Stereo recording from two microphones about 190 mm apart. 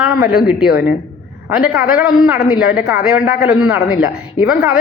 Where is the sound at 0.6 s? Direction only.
55° left (ahead or behind).